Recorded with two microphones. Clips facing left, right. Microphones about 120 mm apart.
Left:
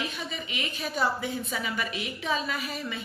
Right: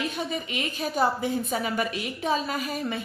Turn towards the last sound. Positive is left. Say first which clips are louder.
# right 5 dB
turn(degrees=-45)  # may be behind; listen again after turning